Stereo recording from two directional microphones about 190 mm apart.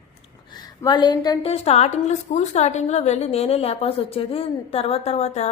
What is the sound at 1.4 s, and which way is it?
A woman's voice, 35° left (ahead or behind).